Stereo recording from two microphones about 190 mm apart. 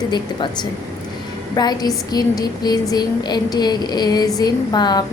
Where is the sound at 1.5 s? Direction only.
20° left (ahead or behind).